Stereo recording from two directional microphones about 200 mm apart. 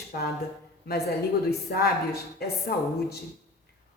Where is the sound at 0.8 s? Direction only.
50° left (ahead or behind).